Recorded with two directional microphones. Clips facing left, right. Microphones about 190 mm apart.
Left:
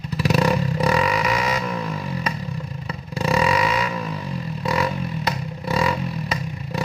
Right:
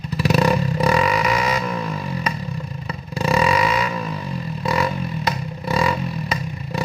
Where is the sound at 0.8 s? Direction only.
50° right (ahead or behind).